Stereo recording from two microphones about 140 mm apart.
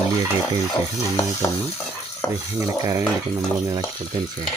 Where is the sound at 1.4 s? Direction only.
25° left (ahead or behind).